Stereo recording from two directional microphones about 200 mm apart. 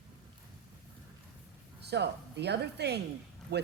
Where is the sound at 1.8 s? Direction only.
55° right (ahead or behind).